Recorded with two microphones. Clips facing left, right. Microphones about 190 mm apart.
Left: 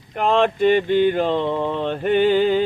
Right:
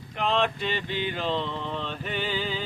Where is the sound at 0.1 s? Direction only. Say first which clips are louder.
Left 8 dB; 50° left (ahead or behind).